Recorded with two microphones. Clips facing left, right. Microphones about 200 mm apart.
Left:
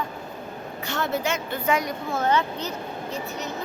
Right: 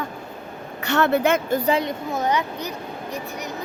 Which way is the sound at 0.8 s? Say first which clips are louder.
Right 8 dB; 70° right (ahead or behind).